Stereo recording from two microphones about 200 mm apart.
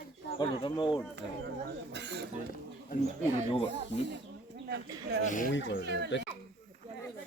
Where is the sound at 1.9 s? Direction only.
60° right (ahead or behind).